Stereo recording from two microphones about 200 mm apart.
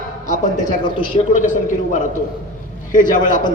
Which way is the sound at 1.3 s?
40° left (ahead or behind).